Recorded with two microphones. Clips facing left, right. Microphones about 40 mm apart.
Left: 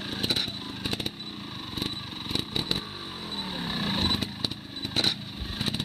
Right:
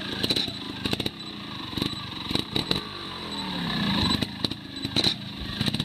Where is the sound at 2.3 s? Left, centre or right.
Centre.